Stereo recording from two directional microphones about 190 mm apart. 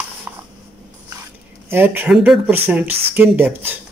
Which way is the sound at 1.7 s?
10° right (ahead or behind).